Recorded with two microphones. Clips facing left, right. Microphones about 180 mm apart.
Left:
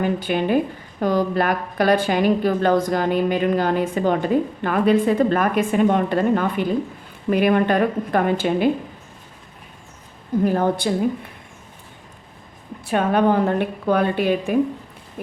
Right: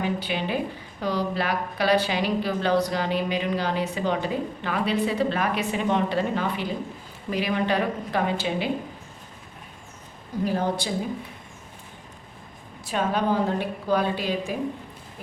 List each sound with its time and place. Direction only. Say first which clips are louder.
0.0 s a woman's voice: left 6 dB; 50° left (ahead or behind)
10.4 s a woman's voice: left 5 dB; 55° left (ahead or behind)
12.8 s a woman's voice: left 7 dB; 60° left (ahead or behind)